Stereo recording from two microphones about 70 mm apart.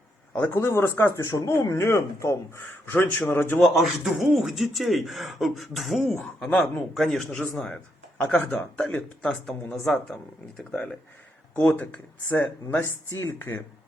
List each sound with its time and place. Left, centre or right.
0.3 s speech: left
1.2 s speech: left
1.5 s speech: left
2.6 s speech: left
3.6 s speech: centre
8.2 s speech: left
9.7 s speech: centre
11.5 s speech: left